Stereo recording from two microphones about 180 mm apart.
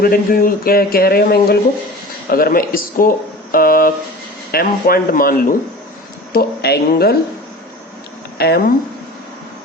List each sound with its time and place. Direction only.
0.0 s speech: 55° left (ahead or behind)
8.4 s speech: 60° left (ahead or behind)